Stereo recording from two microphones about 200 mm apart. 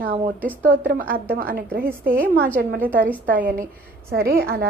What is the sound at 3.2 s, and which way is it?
A woman's voice, 45° right (ahead or behind).